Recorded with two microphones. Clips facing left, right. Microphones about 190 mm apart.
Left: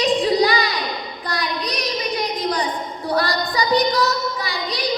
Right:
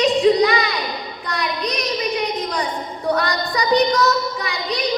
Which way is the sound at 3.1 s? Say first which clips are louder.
Left 1 dB; 35° left (ahead or behind).